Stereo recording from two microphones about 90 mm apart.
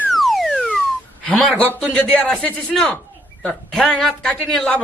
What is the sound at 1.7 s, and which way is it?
Speech, 10° left (ahead or behind).